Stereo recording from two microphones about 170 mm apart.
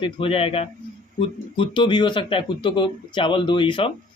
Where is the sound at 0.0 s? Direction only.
35° left (ahead or behind).